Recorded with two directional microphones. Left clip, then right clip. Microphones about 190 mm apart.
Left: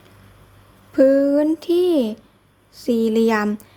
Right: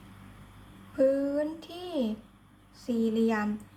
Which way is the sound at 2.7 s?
55° left (ahead or behind).